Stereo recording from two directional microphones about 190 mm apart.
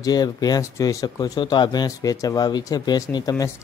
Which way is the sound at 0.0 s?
20° left (ahead or behind).